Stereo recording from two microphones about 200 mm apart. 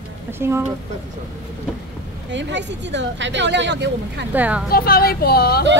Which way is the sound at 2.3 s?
65° right (ahead or behind).